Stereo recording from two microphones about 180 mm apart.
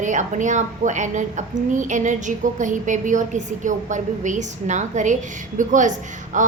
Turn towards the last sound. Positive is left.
turn(degrees=-45)  # may be behind; listen again after turning